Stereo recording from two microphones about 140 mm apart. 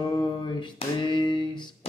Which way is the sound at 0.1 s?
30° left (ahead or behind).